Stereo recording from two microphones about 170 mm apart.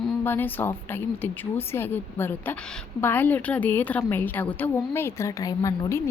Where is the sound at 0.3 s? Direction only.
10° left (ahead or behind).